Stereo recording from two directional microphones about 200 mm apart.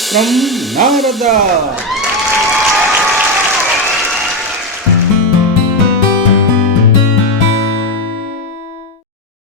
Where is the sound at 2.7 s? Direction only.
Centre (ahead or behind).